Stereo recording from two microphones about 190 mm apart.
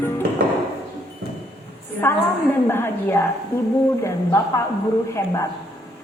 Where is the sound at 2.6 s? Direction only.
10° left (ahead or behind).